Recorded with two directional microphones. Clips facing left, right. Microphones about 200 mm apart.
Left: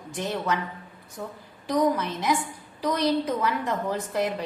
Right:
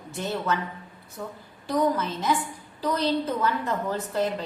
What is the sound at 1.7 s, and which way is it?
A woman's voice, 15° left (ahead or behind).